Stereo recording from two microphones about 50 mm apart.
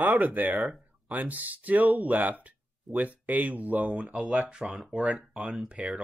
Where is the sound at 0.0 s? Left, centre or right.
Right.